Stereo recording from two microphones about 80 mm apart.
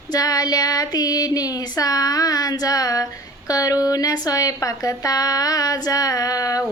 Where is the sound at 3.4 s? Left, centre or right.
Left.